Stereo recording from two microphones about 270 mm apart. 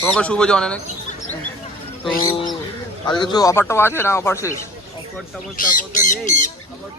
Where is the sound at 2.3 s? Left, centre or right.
Centre.